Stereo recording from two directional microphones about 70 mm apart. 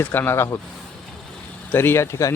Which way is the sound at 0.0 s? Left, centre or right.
Left.